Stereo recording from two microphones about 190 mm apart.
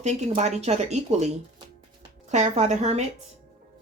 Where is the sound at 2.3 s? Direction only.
35° right (ahead or behind).